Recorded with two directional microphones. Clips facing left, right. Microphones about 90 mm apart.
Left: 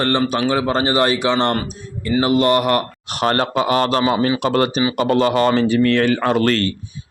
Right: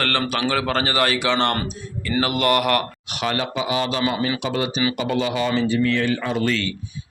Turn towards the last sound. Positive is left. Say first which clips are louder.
# left 6 dB
turn(degrees=50)  # may be behind; listen again after turning